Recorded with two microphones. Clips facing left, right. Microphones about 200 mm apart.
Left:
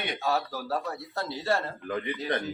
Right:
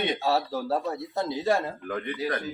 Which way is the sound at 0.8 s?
15° right (ahead or behind).